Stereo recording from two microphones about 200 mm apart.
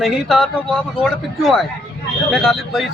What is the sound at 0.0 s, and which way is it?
A man's voice, centre (ahead or behind).